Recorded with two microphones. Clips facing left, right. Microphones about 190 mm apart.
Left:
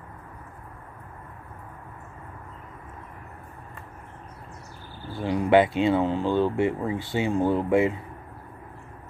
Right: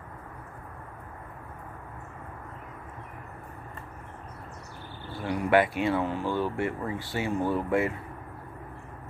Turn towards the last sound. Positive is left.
turn(degrees=20)  # may be behind; listen again after turning